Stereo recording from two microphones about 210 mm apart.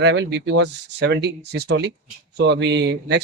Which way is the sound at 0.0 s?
60° right (ahead or behind).